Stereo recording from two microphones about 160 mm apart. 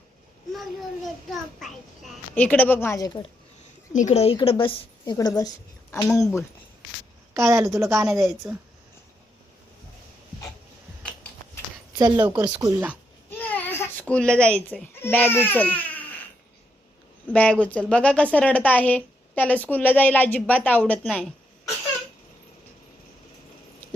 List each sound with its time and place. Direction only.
0.5 s a child's voice: centre (ahead or behind); by 3.1 s 15° left (ahead or behind)
3.9 s a woman's voice: 45° left (ahead or behind)
5.1 s a woman's voice: 20° left (ahead or behind)
7.3 s a woman's voice: 20° right (ahead or behind)
11.9 s a woman's voice: 25° right (ahead or behind)
13.3 s a sound: 10° left (ahead or behind)
14.0 s speech: 5° left (ahead or behind)
17.2 s speech: 10° left (ahead or behind)